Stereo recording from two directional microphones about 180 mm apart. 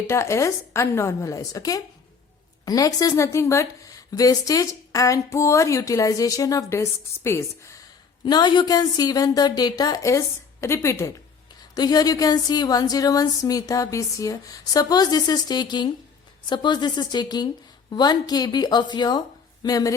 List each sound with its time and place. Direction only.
0.1 s a woman's voice: 15° left (ahead or behind)